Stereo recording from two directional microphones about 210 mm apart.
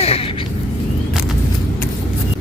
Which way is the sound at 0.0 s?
30° left (ahead or behind).